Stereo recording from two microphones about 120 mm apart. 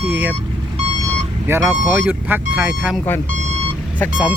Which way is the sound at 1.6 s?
10° right (ahead or behind).